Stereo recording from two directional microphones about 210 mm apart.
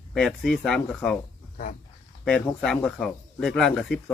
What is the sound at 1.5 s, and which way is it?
Speech, 40° left (ahead or behind).